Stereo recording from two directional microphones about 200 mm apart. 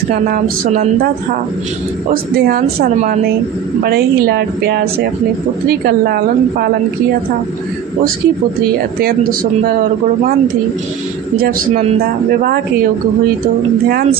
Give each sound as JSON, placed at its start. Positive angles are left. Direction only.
{"t": 0.1, "sound": "speech", "side_deg": -45}
{"t": 2.4, "sound": "speech", "side_deg": -45}
{"t": 11.7, "sound": "speech", "side_deg": -40}